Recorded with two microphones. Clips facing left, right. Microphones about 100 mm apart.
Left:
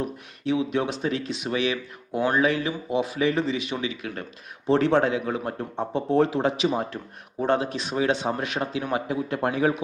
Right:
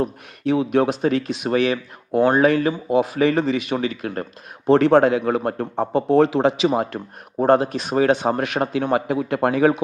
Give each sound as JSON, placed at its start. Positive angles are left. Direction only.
{"t": 0.4, "sound": "speech", "side_deg": -55}
{"t": 7.3, "sound": "speech", "side_deg": -45}